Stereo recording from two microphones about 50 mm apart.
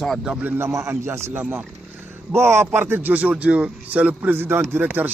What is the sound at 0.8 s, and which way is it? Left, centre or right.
A man's voice, right.